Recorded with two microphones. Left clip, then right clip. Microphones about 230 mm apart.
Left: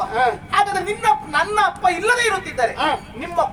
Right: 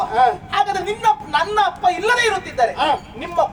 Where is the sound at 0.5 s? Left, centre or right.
Centre.